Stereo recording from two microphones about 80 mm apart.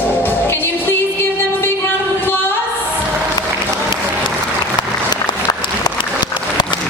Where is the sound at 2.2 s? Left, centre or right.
Left.